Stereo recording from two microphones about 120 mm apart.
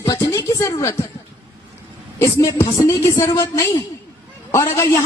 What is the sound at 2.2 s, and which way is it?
A woman's voice, 25° left (ahead or behind).